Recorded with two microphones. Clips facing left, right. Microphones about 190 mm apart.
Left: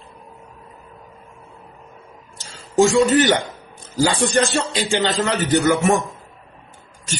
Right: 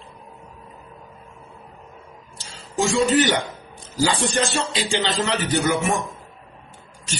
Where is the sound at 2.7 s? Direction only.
50° left (ahead or behind).